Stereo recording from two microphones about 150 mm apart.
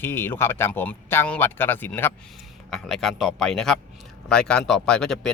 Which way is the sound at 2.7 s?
Centre (ahead or behind).